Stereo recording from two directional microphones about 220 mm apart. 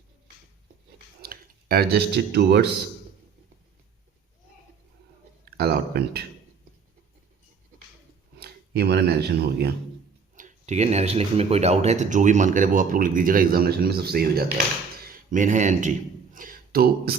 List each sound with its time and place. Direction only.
1.2 s speech: 45° right (ahead or behind)
5.5 s speech: 45° right (ahead or behind)
8.4 s speech: 45° right (ahead or behind)
10.3 s speech: 35° right (ahead or behind)
15.3 s speech: 35° right (ahead or behind)